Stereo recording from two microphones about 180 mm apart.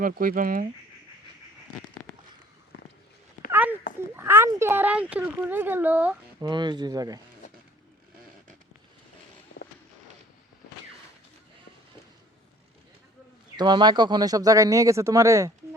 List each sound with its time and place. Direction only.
0.0 s speech: 50° right (ahead or behind)
3.5 s a sound: 10° right (ahead or behind)
4.2 s speech: 15° right (ahead or behind)
6.4 s speech: 25° right (ahead or behind)
13.6 s speech: 25° right (ahead or behind)